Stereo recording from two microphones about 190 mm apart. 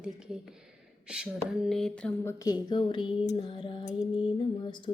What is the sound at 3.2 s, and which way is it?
Music, 20° left (ahead or behind).